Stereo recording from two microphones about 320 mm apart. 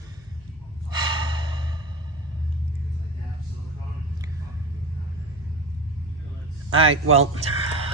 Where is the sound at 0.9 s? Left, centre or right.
Centre.